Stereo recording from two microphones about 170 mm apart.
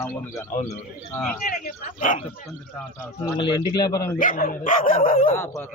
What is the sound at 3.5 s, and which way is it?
Speech, 25° left (ahead or behind).